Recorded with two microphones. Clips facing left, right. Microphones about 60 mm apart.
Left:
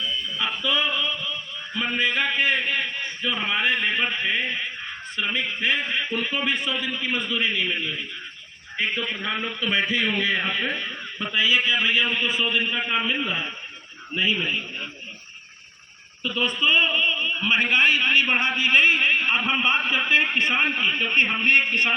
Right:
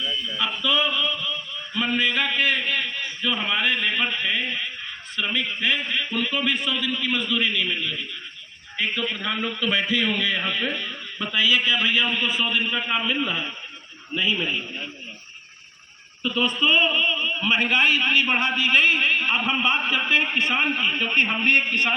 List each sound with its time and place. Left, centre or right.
0.3 s a man's voice: centre
0.9 s a sound: centre
3.4 s a man's voice: centre
11.2 s a man's voice: centre
16.2 s a man's voice: centre
19.5 s speech: centre
19.9 s a man's voice: centre
21.2 s a man's voice: centre
21.5 s a man's voice: left